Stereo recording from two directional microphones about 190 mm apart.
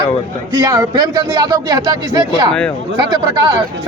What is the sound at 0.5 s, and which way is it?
Speech, 20° right (ahead or behind).